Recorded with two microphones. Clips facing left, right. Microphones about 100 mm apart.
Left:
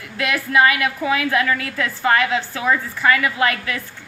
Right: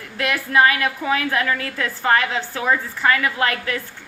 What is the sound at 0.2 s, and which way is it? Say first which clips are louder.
A woman's voice: even; 35° right (ahead or behind).